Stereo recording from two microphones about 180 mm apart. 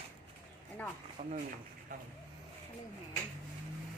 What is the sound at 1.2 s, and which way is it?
Speech, 40° right (ahead or behind).